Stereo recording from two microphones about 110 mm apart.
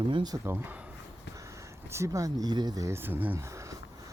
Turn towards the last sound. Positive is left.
turn(degrees=-25)  # may be behind; listen again after turning